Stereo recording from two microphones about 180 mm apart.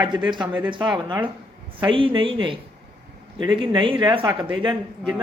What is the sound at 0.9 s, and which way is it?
Speech, 25° right (ahead or behind).